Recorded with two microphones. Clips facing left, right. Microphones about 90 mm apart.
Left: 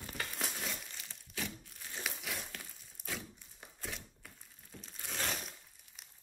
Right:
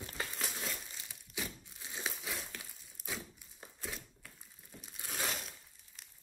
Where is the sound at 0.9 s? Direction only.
15° right (ahead or behind).